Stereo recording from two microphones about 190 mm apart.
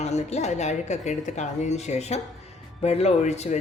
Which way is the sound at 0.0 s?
35° left (ahead or behind).